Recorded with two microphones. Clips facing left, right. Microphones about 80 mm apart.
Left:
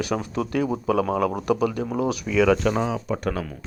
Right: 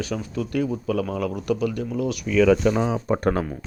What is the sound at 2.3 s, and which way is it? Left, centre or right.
Speech, centre.